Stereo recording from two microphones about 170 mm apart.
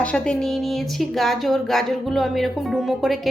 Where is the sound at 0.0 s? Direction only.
5° left (ahead or behind).